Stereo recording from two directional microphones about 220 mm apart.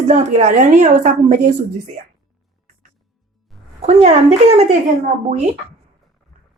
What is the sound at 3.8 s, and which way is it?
Speech, 30° right (ahead or behind).